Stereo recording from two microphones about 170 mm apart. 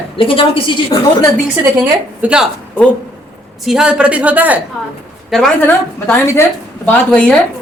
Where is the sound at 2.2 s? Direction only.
5° right (ahead or behind).